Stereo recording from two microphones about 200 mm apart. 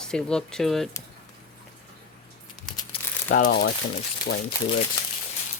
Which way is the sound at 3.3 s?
40° left (ahead or behind).